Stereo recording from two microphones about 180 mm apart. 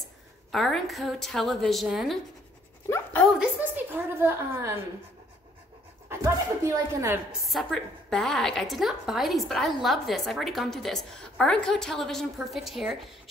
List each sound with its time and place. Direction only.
0.5 s a woman's voice: centre (ahead or behind)
3.3 s a woman's voice: 10° right (ahead or behind)
6.0 s a woman's voice: 15° right (ahead or behind)
7.3 s a woman's voice: centre (ahead or behind)